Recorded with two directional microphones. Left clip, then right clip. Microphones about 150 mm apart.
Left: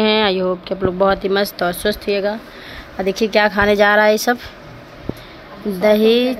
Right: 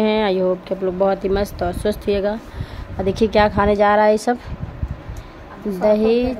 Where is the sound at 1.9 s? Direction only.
25° right (ahead or behind).